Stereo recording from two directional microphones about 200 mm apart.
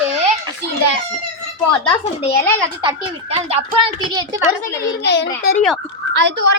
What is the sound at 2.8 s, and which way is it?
Speech, 30° right (ahead or behind).